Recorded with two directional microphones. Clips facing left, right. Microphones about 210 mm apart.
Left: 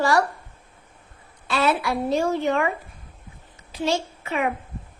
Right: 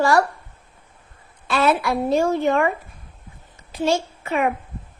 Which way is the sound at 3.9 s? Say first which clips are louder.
Right 3 dB; 45° right (ahead or behind).